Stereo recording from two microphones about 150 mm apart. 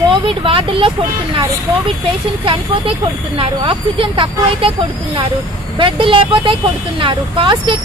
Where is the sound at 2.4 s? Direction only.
35° right (ahead or behind).